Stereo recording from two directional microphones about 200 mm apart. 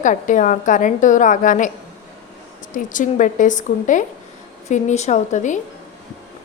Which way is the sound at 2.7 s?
40° left (ahead or behind).